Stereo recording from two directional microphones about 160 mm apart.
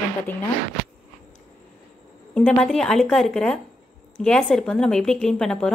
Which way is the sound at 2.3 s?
5° left (ahead or behind).